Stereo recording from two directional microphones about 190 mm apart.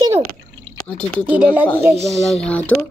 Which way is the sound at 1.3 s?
10° right (ahead or behind).